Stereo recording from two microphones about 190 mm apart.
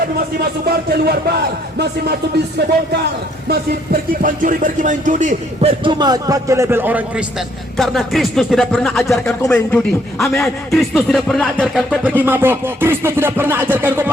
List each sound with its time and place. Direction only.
0.3 s speech: 55° right (ahead or behind)
3.5 s music: 50° right (ahead or behind)
5.8 s a man's voice: 25° right (ahead or behind)